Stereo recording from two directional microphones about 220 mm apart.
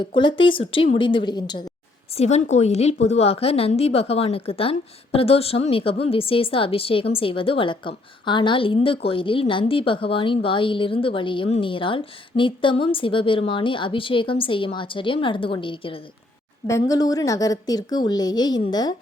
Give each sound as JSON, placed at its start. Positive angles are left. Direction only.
{"t": 0.0, "sound": "speech", "side_deg": 20}
{"t": 2.1, "sound": "a woman's voice", "side_deg": 30}